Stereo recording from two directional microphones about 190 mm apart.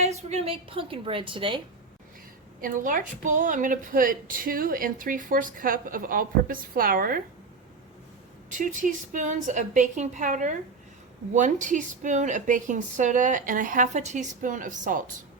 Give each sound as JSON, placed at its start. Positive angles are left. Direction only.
{"t": 0.0, "sound": "a woman's voice", "side_deg": -35}
{"t": 2.6, "sound": "a woman's voice", "side_deg": -45}
{"t": 8.4, "sound": "a woman's voice", "side_deg": -40}